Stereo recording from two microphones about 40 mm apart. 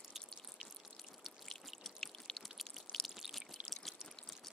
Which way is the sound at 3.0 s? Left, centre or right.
Centre.